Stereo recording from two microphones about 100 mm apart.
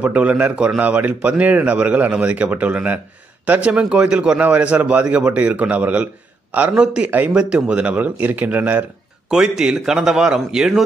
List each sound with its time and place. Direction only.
0.0 s speech: 15° right (ahead or behind)